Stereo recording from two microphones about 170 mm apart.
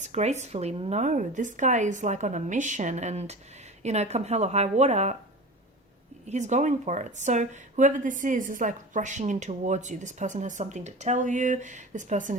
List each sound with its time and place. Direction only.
0.0 s a woman's voice: 45° right (ahead or behind)
6.2 s a woman's voice: 45° right (ahead or behind)